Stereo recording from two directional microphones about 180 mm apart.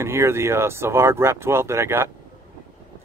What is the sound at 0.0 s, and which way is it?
Speech, 15° right (ahead or behind).